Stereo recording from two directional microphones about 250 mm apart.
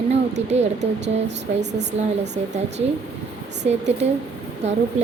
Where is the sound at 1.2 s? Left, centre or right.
Right.